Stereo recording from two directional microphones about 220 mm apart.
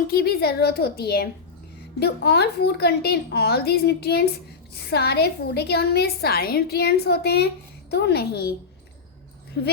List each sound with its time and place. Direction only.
0.1 s a woman's voice: 45° left (ahead or behind)
9.6 s a woman's voice: 55° left (ahead or behind)